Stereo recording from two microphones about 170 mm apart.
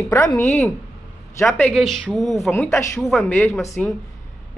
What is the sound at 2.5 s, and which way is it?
Speech, 15° left (ahead or behind).